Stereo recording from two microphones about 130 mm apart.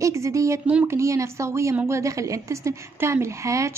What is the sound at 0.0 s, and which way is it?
A woman's voice, 25° right (ahead or behind).